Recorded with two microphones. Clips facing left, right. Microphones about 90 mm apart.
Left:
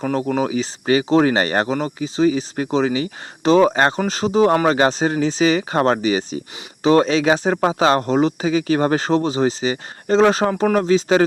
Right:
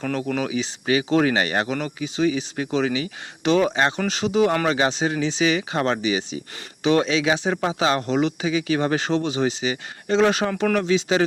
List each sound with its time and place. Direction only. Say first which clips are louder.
0.0 s speech: left 5 dB; 30° left (ahead or behind)
10.5 s speech: left 4 dB; 25° left (ahead or behind)
10.8 s speech: left 6 dB; 40° left (ahead or behind)